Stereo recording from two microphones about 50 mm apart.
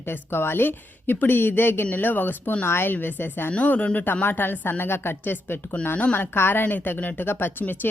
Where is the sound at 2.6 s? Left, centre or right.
Left.